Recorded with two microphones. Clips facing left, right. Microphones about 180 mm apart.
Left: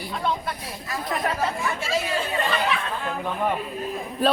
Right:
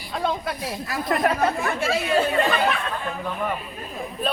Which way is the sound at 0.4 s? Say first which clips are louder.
Right 4 dB; 65° right (ahead or behind).